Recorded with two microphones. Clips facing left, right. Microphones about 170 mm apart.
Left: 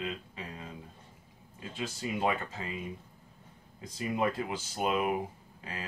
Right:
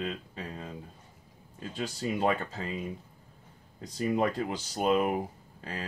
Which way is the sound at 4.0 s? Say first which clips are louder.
Right 3 dB; 40° right (ahead or behind).